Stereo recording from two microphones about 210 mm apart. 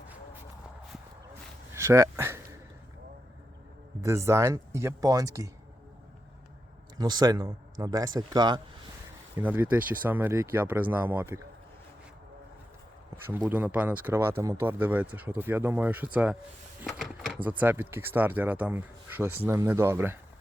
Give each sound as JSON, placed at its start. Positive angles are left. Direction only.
{"t": 1.7, "sound": "a sound", "side_deg": -15}
{"t": 4.0, "sound": "speech", "side_deg": -15}
{"t": 7.0, "sound": "speech", "side_deg": -20}
{"t": 9.4, "sound": "speech", "side_deg": -10}
{"t": 13.2, "sound": "speech", "side_deg": -10}
{"t": 16.8, "sound": "a sound", "side_deg": 0}
{"t": 17.6, "sound": "speech", "side_deg": -10}